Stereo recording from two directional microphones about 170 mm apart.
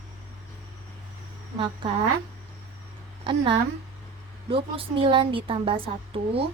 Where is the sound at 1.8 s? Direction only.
30° right (ahead or behind).